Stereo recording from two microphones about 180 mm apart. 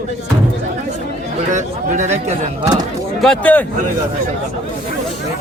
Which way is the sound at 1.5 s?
40° right (ahead or behind).